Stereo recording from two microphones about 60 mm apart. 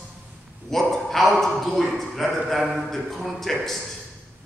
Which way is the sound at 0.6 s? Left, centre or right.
Centre.